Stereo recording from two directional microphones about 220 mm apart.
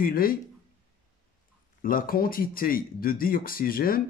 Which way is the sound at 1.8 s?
40° left (ahead or behind).